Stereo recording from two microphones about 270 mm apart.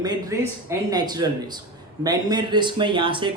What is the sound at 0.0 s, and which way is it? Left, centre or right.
Speech, centre.